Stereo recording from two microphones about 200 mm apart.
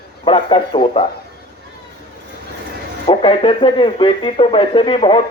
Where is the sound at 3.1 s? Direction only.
25° left (ahead or behind).